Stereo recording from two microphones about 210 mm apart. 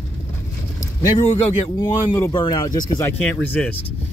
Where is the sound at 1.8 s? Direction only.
15° left (ahead or behind).